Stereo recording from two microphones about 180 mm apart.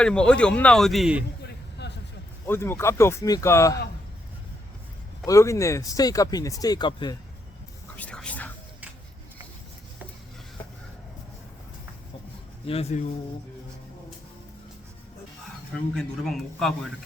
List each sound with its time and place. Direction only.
0.0 s speech: 5° left (ahead or behind)
1.8 s vehicle: 65° left (ahead or behind)
2.5 s speech: 15° left (ahead or behind)
5.2 s speech: 15° left (ahead or behind)
7.9 s whispering: 5° left (ahead or behind)
12.6 s speech: 35° left (ahead or behind)
16.0 s speech: centre (ahead or behind)